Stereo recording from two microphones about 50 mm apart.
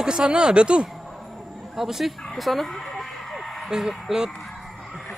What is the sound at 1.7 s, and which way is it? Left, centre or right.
Speech, centre.